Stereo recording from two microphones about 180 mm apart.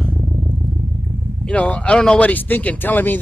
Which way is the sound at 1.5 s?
5° left (ahead or behind).